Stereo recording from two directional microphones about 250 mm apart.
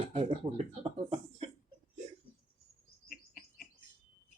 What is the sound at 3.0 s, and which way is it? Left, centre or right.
Bird, left.